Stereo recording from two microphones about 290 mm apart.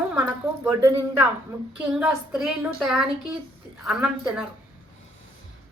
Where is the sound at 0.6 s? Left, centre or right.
Centre.